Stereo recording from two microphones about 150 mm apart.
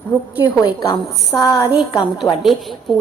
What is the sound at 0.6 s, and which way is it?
A woman's voice, 25° left (ahead or behind).